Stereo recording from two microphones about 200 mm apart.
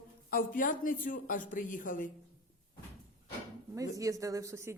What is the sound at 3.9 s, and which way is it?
Speech, 15° right (ahead or behind).